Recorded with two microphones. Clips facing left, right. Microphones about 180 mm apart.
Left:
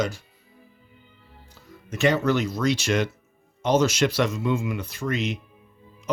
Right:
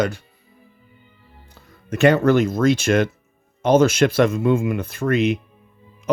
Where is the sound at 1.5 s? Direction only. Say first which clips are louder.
Right 7 dB; 60° right (ahead or behind).